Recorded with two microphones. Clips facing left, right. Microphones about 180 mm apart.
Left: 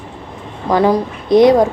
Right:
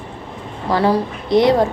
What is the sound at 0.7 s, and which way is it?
A woman's voice, 15° left (ahead or behind).